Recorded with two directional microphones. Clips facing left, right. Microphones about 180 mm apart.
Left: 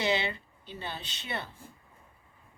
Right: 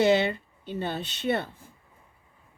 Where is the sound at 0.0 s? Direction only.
50° right (ahead or behind).